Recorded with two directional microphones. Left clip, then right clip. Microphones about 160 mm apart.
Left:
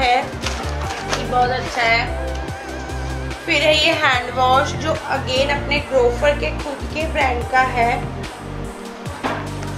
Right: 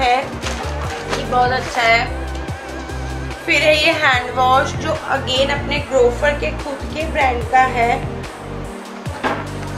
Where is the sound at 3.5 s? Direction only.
5° left (ahead or behind).